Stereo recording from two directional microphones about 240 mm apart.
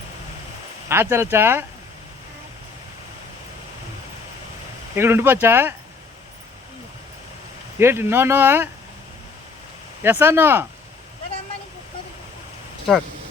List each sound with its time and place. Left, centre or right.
0.9 s speech: centre
4.9 s speech: centre
7.8 s speech: centre
10.0 s speech: centre